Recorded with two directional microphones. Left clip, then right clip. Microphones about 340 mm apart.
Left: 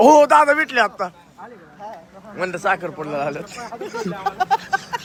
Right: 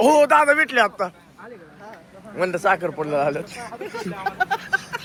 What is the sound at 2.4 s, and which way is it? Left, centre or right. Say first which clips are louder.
A man's voice: right 1 dB; centre.